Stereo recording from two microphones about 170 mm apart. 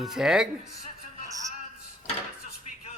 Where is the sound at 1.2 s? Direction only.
20° right (ahead or behind).